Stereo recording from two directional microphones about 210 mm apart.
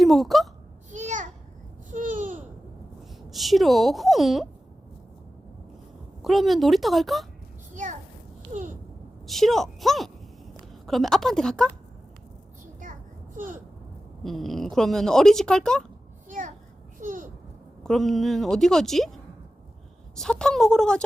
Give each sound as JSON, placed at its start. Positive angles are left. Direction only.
{"t": 0.0, "sound": "speech", "side_deg": 0}
{"t": 0.9, "sound": "a sound", "side_deg": -35}
{"t": 1.9, "sound": "babbling", "side_deg": -40}
{"t": 3.2, "sound": "speech", "side_deg": 0}
{"t": 6.2, "sound": "speech", "side_deg": 0}
{"t": 9.2, "sound": "speech", "side_deg": 0}
{"t": 12.8, "sound": "a sound", "side_deg": -40}
{"t": 14.3, "sound": "speech", "side_deg": 0}
{"t": 17.0, "sound": "babbling", "side_deg": -40}
{"t": 17.8, "sound": "speech", "side_deg": 0}